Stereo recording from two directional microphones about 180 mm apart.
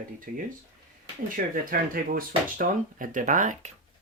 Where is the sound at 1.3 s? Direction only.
50° right (ahead or behind).